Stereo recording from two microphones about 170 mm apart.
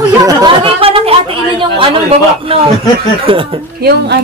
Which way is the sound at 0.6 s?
35° right (ahead or behind).